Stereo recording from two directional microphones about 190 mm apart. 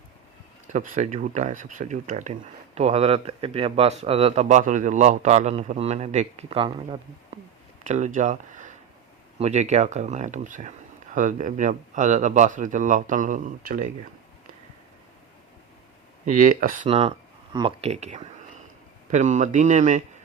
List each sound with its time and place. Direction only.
0.7 s speech: 40° right (ahead or behind)
7.9 s speech: 40° right (ahead or behind)
16.2 s speech: 45° right (ahead or behind)
16.8 s speech: 30° right (ahead or behind)